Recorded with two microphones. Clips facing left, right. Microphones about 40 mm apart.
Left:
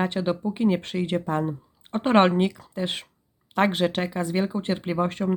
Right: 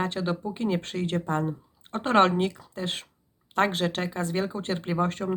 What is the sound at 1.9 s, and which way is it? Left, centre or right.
Speech, centre.